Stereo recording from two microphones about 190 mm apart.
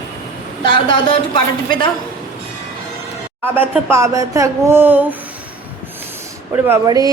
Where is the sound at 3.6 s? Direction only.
15° right (ahead or behind).